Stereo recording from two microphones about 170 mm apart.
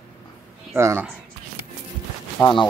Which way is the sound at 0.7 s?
15° right (ahead or behind).